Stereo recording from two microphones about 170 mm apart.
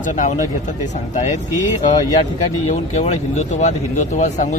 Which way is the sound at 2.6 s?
40° left (ahead or behind).